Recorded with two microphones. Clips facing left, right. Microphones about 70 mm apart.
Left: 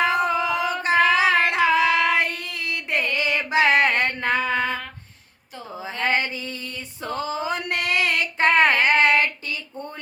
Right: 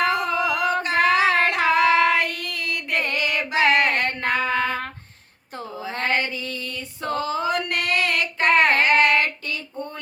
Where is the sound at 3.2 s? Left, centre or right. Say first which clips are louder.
Left 2 dB; left.